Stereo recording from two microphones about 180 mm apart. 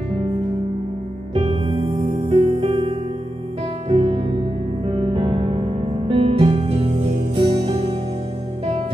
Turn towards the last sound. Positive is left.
turn(degrees=-30)  # may be behind; listen again after turning